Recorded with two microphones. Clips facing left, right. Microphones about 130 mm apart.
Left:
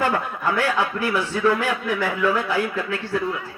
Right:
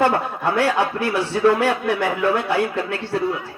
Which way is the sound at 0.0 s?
35° right (ahead or behind).